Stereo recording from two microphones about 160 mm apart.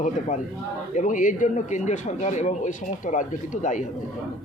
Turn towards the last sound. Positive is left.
turn(degrees=50)  # may be behind; listen again after turning